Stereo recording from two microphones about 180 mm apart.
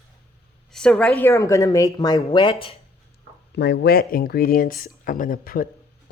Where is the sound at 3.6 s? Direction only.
70° left (ahead or behind); by 5.7 s 50° left (ahead or behind).